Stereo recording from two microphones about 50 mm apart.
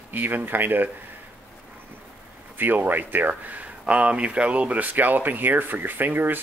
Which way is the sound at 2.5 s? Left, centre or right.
Right.